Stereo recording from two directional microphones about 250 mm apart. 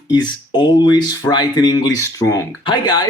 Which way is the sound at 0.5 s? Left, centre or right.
Centre.